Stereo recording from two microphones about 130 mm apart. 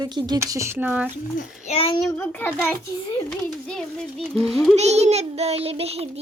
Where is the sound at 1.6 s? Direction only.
50° left (ahead or behind).